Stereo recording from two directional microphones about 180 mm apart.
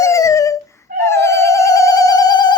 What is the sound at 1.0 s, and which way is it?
Cat, 15° left (ahead or behind).